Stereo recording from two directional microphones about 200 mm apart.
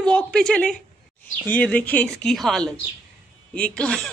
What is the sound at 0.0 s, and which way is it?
Speech, 5° left (ahead or behind).